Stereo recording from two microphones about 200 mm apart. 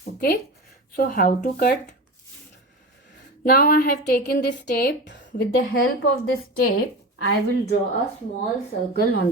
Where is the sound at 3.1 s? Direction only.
50° left (ahead or behind).